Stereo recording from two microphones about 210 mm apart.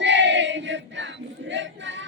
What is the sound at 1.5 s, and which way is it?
Choir, 60° right (ahead or behind).